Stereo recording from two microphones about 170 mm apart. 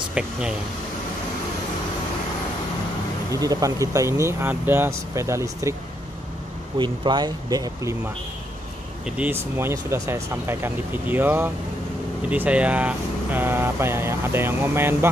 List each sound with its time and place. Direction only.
0.1 s speech: 5° right (ahead or behind)
3.3 s speech: 20° right (ahead or behind)
6.8 s speech: 25° right (ahead or behind)
9.0 s speech: 10° right (ahead or behind)